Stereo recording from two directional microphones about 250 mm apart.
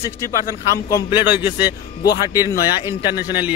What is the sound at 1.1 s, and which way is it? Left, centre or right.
A man's voice, centre.